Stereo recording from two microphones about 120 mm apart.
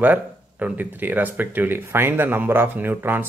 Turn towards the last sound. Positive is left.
turn(degrees=-15)  # may be behind; listen again after turning